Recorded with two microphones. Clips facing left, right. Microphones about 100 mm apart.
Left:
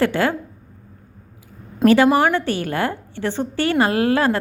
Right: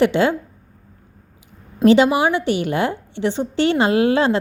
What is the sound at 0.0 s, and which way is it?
Speech, 20° right (ahead or behind).